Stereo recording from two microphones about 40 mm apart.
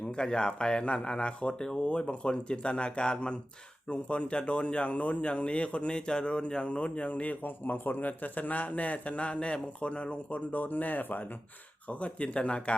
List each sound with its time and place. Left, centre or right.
0.1 s speech: left
7.4 s speech: left
10.5 s speech: left
11.9 s speech: left